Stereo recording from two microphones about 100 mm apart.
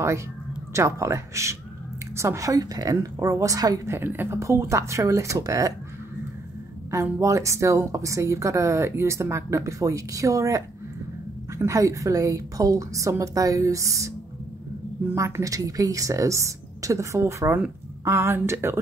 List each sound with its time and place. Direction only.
0.7 s a woman's voice: 30° right (ahead or behind)
3.9 s a woman's voice: 20° right (ahead or behind)
6.9 s a woman's voice: 30° right (ahead or behind)
15.1 s a woman's voice: 30° right (ahead or behind)